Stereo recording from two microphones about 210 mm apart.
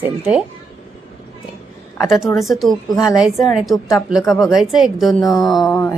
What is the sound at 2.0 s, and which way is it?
A woman's voice, centre (ahead or behind).